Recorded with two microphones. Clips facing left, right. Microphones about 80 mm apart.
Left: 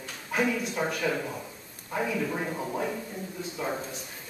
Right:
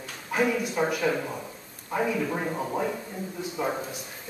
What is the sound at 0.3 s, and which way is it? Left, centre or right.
A woman's voice, centre.